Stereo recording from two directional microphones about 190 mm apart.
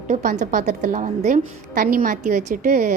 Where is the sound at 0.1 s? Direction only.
40° right (ahead or behind).